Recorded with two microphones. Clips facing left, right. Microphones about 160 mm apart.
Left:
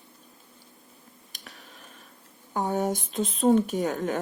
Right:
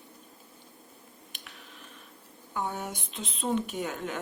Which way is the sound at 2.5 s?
40° left (ahead or behind).